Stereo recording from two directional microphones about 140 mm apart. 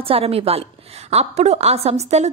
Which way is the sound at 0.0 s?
45° right (ahead or behind).